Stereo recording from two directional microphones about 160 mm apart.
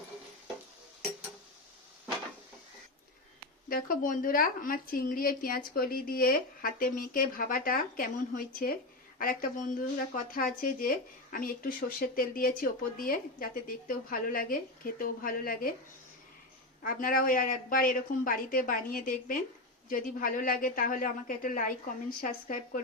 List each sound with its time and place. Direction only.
3.7 s speech: 60° left (ahead or behind)
16.8 s speech: 60° left (ahead or behind)